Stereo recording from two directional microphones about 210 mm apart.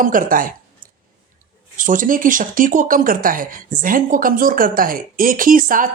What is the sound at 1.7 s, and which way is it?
Speech, 40° right (ahead or behind).